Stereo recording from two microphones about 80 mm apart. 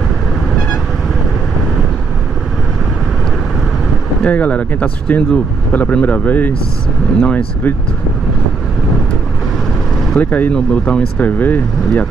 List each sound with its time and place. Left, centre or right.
4.2 s speech: centre
10.1 s speech: left